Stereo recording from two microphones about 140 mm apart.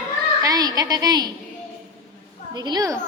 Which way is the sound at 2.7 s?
25° right (ahead or behind).